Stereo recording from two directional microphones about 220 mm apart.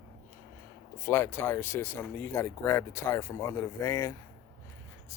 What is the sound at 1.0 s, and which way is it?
Speech, 10° left (ahead or behind).